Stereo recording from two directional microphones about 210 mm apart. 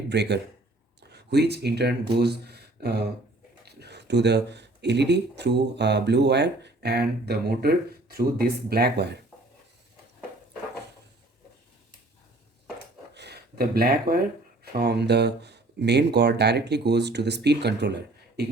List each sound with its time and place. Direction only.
0.1 s speech: 55° right (ahead or behind)
13.1 s speech: 50° right (ahead or behind)